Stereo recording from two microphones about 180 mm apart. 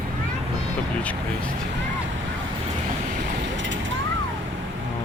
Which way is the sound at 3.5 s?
90° right.